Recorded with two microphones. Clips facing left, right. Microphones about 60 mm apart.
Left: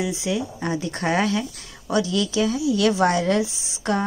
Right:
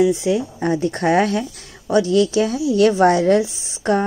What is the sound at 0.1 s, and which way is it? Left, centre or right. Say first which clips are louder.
Speech: right 6 dB; right.